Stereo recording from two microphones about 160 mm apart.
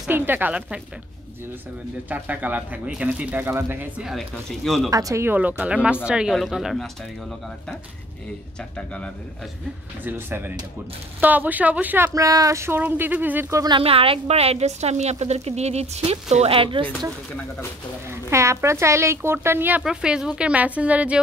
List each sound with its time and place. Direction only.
0.1 s speech: 10° right (ahead or behind)
2.0 s speech: 10° right (ahead or behind)
4.0 s speech: centre (ahead or behind)
4.9 s speech: 20° right (ahead or behind); by 6.9 s centre (ahead or behind)
8.7 s a man's voice: 5° left (ahead or behind)
10.0 s speech: 15° right (ahead or behind)
12.1 s speech: 20° right (ahead or behind)
13.7 s a woman's voice: 35° right (ahead or behind)
18.3 s speech: 20° right (ahead or behind)